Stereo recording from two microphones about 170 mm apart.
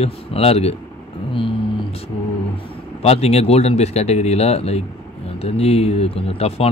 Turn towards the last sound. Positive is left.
turn(degrees=35)  # may be behind; listen again after turning